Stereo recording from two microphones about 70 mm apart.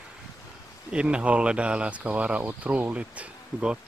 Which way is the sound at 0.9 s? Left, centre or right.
Centre.